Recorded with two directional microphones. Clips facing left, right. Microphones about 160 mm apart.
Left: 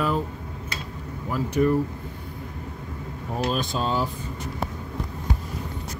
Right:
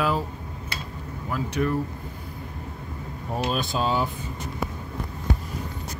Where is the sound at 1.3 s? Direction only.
20° left (ahead or behind).